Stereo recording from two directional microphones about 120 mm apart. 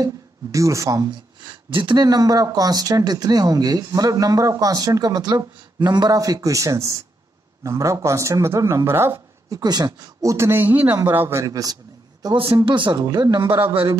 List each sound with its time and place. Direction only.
0.0 s speech: 25° right (ahead or behind)
9.6 s a man's voice: 35° right (ahead or behind)